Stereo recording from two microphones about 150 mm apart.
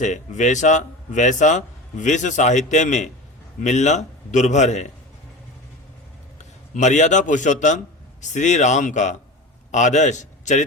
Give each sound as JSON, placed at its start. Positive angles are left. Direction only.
{"t": 0.0, "sound": "speech", "side_deg": 55}
{"t": 6.4, "sound": "a man's voice", "side_deg": 50}